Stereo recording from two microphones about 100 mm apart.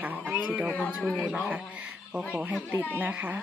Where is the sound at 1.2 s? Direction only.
10° right (ahead or behind).